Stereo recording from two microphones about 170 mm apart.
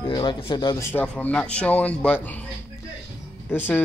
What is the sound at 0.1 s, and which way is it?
Speech, 30° left (ahead or behind).